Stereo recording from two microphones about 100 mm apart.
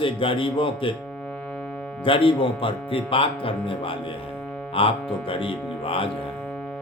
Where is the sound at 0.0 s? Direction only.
60° left (ahead or behind).